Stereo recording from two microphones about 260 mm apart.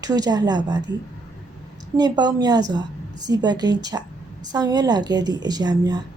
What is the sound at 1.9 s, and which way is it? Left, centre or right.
A woman's voice, centre.